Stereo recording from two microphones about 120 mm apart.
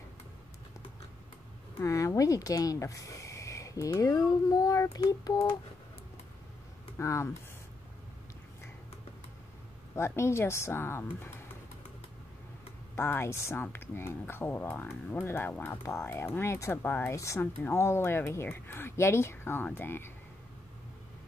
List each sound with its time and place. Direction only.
1.8 s speech: 25° left (ahead or behind)
7.0 s speech: 25° left (ahead or behind)
9.9 s speech: 20° left (ahead or behind)
12.9 s speech: 20° left (ahead or behind)